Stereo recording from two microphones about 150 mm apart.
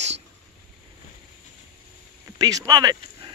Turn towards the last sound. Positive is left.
turn(degrees=-25)  # may be behind; listen again after turning